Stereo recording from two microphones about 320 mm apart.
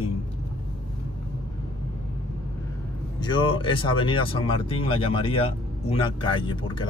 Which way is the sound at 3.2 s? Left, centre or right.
Centre.